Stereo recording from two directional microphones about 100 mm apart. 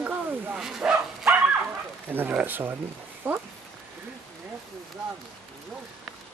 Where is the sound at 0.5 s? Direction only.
5° right (ahead or behind); by 3.4 s 20° right (ahead or behind).